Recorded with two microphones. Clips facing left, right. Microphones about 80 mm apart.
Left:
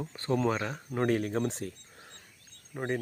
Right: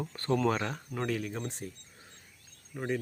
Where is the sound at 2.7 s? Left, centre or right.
Left.